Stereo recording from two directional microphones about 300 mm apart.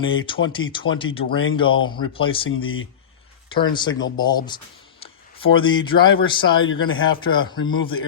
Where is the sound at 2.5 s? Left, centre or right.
Left.